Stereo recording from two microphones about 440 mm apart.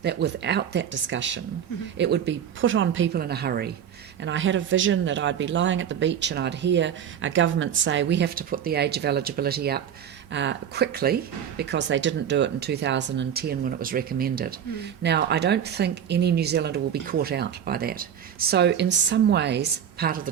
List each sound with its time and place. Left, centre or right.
0.0 s speech: right